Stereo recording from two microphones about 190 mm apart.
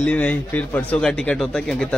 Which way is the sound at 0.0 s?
5° left (ahead or behind).